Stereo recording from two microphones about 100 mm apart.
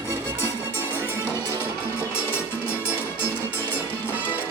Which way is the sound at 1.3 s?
25° left (ahead or behind).